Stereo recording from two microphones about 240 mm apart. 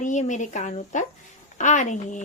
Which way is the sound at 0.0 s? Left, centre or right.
Left.